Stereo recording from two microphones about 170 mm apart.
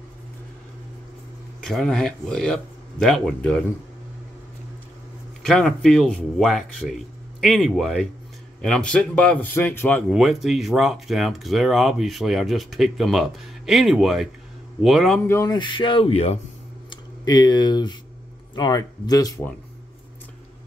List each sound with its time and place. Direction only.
1.6 s speech: centre (ahead or behind)
5.4 s a man's voice: 5° left (ahead or behind)
10.1 s speech: centre (ahead or behind)
15.2 s speech: 20° left (ahead or behind); by 16.3 s 35° left (ahead or behind)
16.9 s speech: 25° left (ahead or behind)